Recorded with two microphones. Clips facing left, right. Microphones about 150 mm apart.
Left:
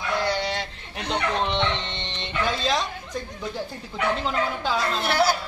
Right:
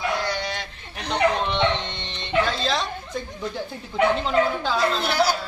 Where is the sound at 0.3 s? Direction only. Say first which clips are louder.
Left 2 dB; 30° left (ahead or behind).